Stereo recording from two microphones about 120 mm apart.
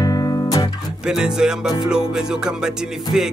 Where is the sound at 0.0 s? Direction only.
30° left (ahead or behind).